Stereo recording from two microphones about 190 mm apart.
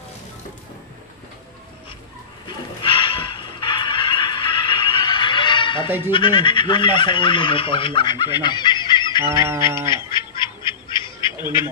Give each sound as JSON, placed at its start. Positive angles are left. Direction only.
{"t": 2.4, "sound": "a sound", "side_deg": 25}
{"t": 6.0, "sound": "speech", "side_deg": 25}
{"t": 9.8, "sound": "squawk", "side_deg": 25}